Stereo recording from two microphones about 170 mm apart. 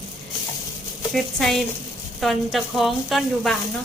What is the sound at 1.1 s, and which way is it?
A woman's voice, centre (ahead or behind).